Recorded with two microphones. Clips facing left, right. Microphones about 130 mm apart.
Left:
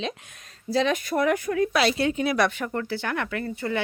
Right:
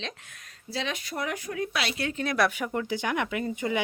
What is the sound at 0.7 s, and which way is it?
Speech, 45° left (ahead or behind).